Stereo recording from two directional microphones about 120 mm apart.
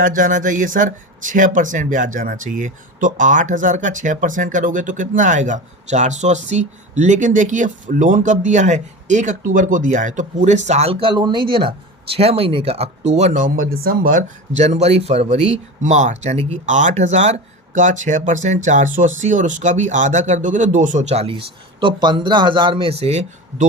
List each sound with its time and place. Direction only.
0.1 s speech: 90° right; by 10.9 s 65° right (ahead or behind)
11.0 s speech: 40° right (ahead or behind); by 13.5 s 80° right
14.5 s speech: 70° right (ahead or behind)
17.7 s speech: 90° right; by 23.6 s 65° right (ahead or behind)